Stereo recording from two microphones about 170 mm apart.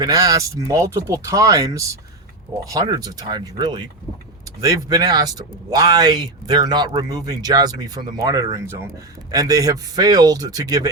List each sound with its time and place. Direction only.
0.0 s speech: 20° right (ahead or behind)